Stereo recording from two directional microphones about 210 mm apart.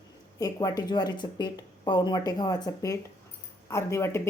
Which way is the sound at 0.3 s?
15° left (ahead or behind).